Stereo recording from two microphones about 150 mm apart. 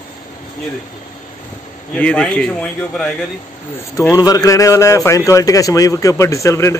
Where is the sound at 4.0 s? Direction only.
25° left (ahead or behind).